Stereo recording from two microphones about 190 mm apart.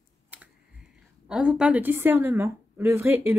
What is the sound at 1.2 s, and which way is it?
A woman's voice, 5° right (ahead or behind).